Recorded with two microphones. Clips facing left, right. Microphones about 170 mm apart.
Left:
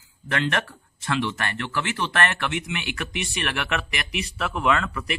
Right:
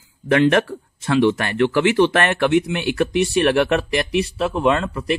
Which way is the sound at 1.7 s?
60° right (ahead or behind).